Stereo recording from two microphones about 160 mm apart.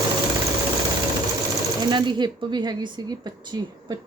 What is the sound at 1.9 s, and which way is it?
Speech, 30° right (ahead or behind).